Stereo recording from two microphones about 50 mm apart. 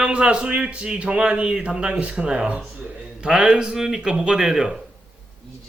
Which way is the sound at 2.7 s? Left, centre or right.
Right.